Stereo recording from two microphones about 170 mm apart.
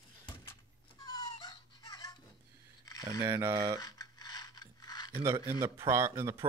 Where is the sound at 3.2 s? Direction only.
15° right (ahead or behind).